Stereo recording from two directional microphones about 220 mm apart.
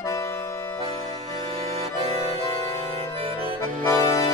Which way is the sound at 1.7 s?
30° right (ahead or behind).